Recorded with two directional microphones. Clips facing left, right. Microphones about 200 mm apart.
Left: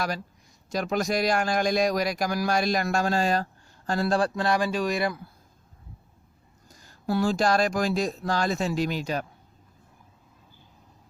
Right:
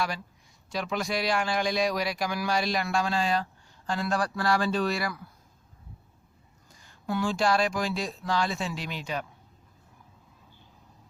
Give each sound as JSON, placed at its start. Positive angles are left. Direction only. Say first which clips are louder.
{"t": 0.7, "sound": "a man's voice", "louder": "left 4 dB", "side_deg": 45}
{"t": 6.7, "sound": "a man's voice", "louder": "left 4 dB", "side_deg": 40}